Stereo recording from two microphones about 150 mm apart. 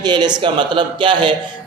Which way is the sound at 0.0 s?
30° right (ahead or behind).